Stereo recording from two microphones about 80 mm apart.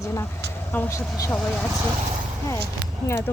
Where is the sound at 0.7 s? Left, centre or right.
Left.